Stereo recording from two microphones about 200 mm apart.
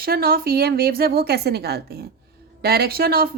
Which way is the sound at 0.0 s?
50° right (ahead or behind).